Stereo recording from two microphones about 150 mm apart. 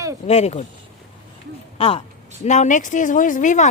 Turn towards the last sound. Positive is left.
turn(degrees=55)  # may be behind; listen again after turning